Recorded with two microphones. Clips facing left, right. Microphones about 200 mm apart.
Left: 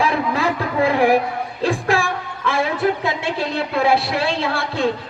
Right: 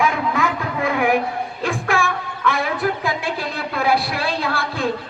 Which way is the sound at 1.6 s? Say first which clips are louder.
Left 3 dB; 35° left (ahead or behind).